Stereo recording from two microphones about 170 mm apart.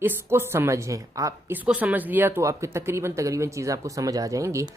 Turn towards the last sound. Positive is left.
turn(degrees=-20)  # may be behind; listen again after turning